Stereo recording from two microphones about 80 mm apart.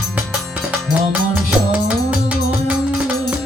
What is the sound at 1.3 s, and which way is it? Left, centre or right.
Music, centre.